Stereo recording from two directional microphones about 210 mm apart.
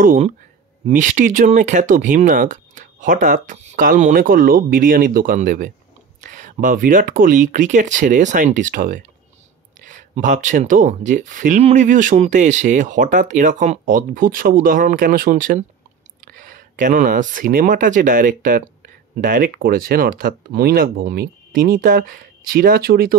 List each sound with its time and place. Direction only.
0.0 s speech: 40° right (ahead or behind)